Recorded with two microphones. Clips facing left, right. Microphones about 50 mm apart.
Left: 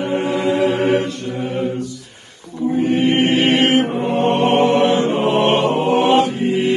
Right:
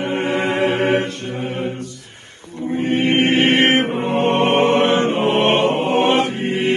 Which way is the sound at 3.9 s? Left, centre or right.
Right.